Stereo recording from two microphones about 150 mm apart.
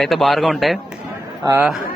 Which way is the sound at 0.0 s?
Centre (ahead or behind).